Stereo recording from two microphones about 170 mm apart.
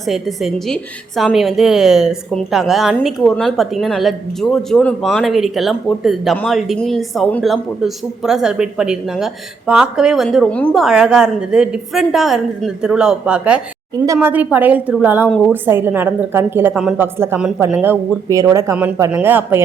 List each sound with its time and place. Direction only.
0.0 s a woman's voice: centre (ahead or behind)
16.7 s a woman's voice: 5° right (ahead or behind)